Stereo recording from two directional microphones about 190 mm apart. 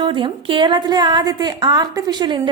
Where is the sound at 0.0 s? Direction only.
25° right (ahead or behind).